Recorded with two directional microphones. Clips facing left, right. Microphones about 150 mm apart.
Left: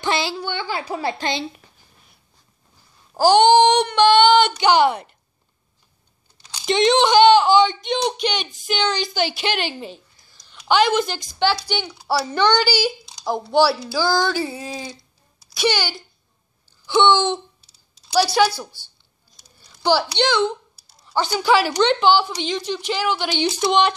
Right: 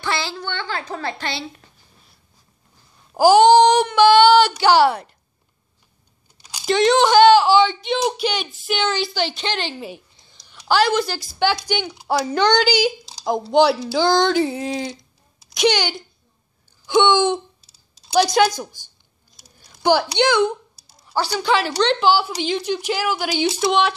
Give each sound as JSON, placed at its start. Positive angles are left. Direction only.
{"t": 0.0, "sound": "a woman's voice", "side_deg": 15}
{"t": 3.2, "sound": "speech", "side_deg": -5}
{"t": 6.4, "sound": "speech", "side_deg": -5}
{"t": 9.8, "sound": "a woman's voice", "side_deg": -10}
{"t": 10.1, "sound": "a sound", "side_deg": -20}
{"t": 10.5, "sound": "a woman's voice", "side_deg": 0}
{"t": 11.3, "sound": "a woman's voice", "side_deg": -15}
{"t": 17.6, "sound": "a sound", "side_deg": -40}
{"t": 18.1, "sound": "a woman's voice", "side_deg": -15}
{"t": 19.3, "sound": "typing", "side_deg": -15}
{"t": 20.2, "sound": "a woman's voice", "side_deg": -15}
{"t": 21.1, "sound": "a woman's voice", "side_deg": 0}